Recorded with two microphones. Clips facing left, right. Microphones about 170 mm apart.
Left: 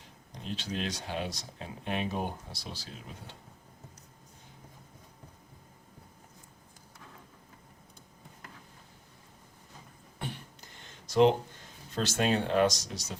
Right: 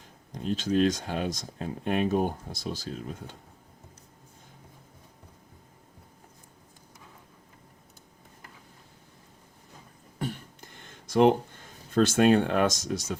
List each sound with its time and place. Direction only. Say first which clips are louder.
0.4 s speech: right 11 dB; 45° right (ahead or behind)
10.2 s a sound: right 6 dB; 50° right (ahead or behind)
11.9 s speech: right 8 dB; 55° right (ahead or behind)